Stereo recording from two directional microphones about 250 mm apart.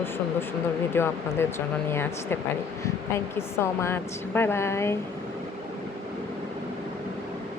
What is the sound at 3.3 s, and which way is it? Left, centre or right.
Speech, centre.